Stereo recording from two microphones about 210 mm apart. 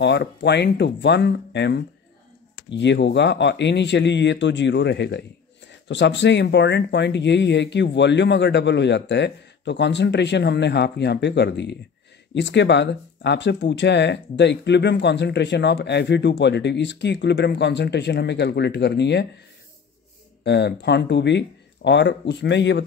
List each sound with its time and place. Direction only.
0.0 s speech: 55° left (ahead or behind)
20.4 s speech: 55° left (ahead or behind)